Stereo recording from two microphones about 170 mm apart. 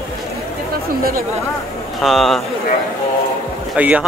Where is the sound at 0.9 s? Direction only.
60° right (ahead or behind).